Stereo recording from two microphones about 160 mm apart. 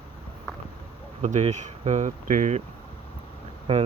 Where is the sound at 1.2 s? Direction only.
45° right (ahead or behind).